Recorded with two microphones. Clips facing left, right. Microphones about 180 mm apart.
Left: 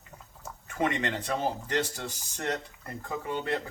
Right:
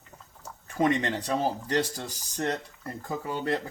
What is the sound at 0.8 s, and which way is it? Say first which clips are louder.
Speech: right 4 dB; 35° right (ahead or behind).